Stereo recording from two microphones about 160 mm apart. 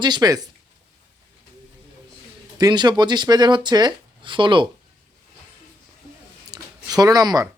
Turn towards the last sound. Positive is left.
turn(degrees=-25)  # may be behind; listen again after turning